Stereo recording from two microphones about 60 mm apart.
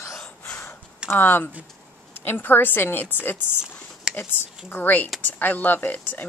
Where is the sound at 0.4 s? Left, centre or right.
Left.